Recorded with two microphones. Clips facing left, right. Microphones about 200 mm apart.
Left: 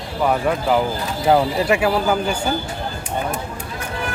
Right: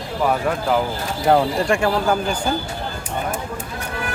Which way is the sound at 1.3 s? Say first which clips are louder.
Left 1 dB; 5° left (ahead or behind).